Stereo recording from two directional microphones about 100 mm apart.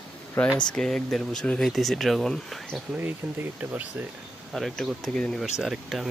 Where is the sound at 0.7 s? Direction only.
5° left (ahead or behind).